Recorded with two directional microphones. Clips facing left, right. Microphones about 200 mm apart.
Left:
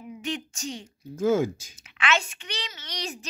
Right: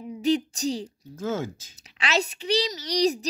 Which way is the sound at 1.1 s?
10° left (ahead or behind).